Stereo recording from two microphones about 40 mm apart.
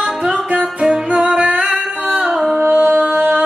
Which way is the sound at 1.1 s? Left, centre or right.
Right.